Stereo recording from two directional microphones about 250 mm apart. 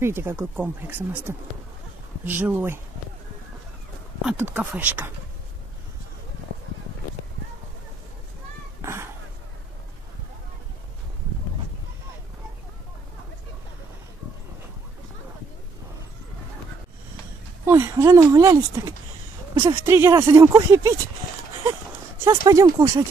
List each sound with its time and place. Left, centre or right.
0.0 s speech: centre
4.2 s speech: centre
8.8 s a sound: centre
17.6 s speech: centre
22.2 s speech: centre